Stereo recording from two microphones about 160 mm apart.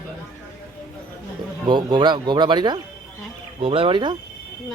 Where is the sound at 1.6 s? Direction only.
30° right (ahead or behind).